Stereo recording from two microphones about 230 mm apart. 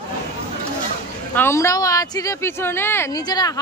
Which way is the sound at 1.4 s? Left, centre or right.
Centre.